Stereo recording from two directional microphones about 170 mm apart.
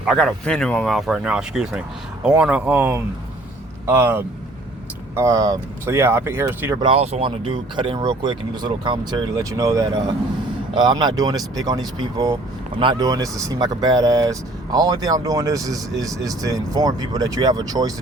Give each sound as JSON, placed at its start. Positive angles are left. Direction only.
{"t": 0.0, "sound": "speech", "side_deg": 0}
{"t": 6.7, "sound": "speech", "side_deg": -35}